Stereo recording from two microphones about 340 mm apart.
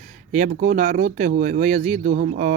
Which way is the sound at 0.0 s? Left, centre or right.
Right.